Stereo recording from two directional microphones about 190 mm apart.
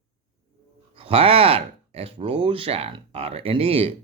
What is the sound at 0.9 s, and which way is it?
Speech, 30° right (ahead or behind).